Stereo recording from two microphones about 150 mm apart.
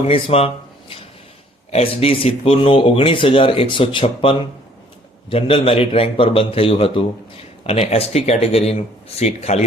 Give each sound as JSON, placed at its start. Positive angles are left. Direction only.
{"t": 0.0, "sound": "a man's voice", "side_deg": 40}